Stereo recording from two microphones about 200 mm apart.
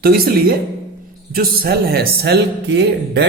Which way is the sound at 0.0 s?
50° right (ahead or behind).